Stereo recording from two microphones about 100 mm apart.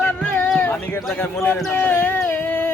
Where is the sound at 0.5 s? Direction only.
20° left (ahead or behind).